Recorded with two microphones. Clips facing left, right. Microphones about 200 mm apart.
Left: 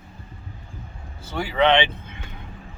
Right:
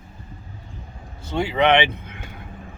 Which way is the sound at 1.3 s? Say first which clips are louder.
Right 1 dB; 20° right (ahead or behind).